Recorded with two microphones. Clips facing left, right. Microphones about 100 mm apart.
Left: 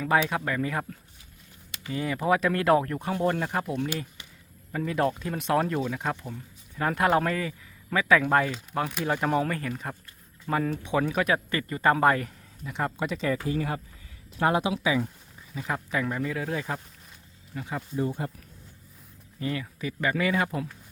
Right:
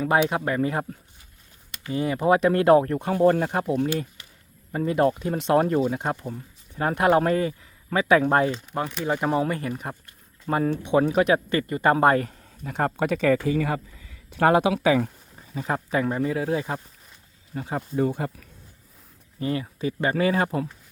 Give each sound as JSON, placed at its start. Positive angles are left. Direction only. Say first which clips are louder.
{"t": 0.0, "sound": "speech", "louder": "right 3 dB", "side_deg": -25}
{"t": 4.7, "sound": "speech", "louder": "right 5 dB", "side_deg": -30}
{"t": 8.8, "sound": "speech", "louder": "right 1 dB", "side_deg": 5}
{"t": 9.4, "sound": "speech", "louder": "right 3 dB", "side_deg": -25}
{"t": 10.4, "sound": "speech", "louder": "right 4 dB", "side_deg": -35}
{"t": 12.6, "sound": "speech", "louder": "right 5 dB", "side_deg": -50}
{"t": 15.4, "sound": "speech", "louder": "right 4 dB", "side_deg": -40}
{"t": 17.9, "sound": "speech", "louder": "right 5 dB", "side_deg": -65}
{"t": 19.4, "sound": "speech", "louder": "right 5 dB", "side_deg": -30}